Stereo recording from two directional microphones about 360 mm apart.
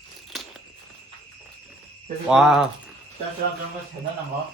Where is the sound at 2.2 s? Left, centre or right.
Centre.